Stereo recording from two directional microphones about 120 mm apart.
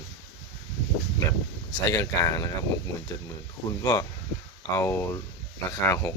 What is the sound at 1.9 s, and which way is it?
Speech, 25° left (ahead or behind).